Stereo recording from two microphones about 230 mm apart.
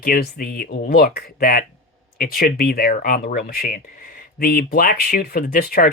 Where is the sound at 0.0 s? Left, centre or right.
Left.